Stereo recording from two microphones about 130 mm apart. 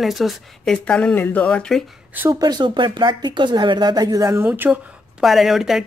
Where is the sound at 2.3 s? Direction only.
30° right (ahead or behind); by 4.7 s 15° right (ahead or behind).